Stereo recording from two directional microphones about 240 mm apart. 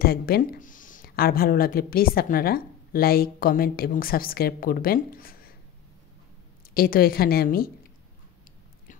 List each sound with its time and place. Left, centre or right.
0.0 s speech: left
6.7 s speech: left